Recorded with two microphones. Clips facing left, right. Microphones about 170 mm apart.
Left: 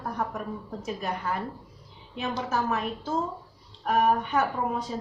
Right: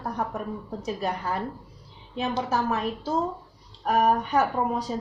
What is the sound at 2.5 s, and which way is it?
A woman's voice, 35° right (ahead or behind).